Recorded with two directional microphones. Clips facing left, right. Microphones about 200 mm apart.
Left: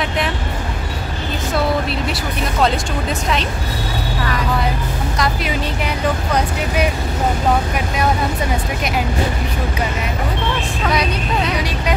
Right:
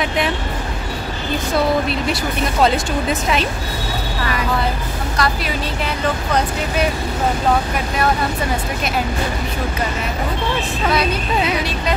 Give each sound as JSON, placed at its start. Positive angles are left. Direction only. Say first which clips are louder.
{"t": 2.6, "sound": "speech", "louder": "right 2 dB", "side_deg": -5}
{"t": 5.1, "sound": "speech", "louder": "right 1 dB", "side_deg": 20}